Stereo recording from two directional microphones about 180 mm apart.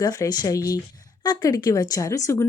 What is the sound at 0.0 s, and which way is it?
Speech, 20° left (ahead or behind).